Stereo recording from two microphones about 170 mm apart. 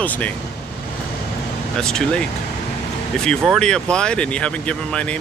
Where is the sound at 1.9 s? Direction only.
5° left (ahead or behind).